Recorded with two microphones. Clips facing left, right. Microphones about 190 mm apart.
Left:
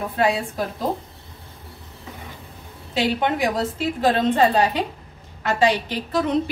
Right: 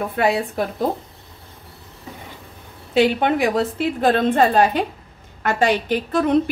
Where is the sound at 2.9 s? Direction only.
55° right (ahead or behind).